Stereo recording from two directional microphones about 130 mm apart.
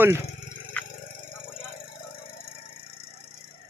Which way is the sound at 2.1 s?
90° left.